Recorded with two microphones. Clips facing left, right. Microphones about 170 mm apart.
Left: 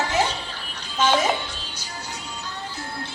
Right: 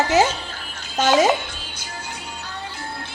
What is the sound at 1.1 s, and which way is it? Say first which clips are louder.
Speech: right 5 dB; 75° right (ahead or behind).